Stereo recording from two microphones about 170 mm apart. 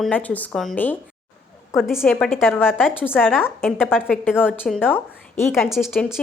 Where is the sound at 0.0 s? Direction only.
10° left (ahead or behind).